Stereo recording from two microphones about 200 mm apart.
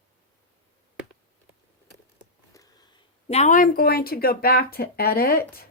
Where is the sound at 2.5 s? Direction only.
20° left (ahead or behind); by 5.7 s 50° left (ahead or behind).